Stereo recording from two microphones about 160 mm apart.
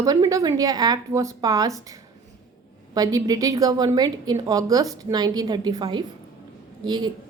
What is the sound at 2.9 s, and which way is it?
A woman's voice, 25° right (ahead or behind).